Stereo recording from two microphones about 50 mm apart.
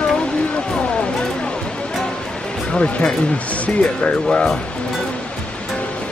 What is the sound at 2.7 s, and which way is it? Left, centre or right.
Speech, left.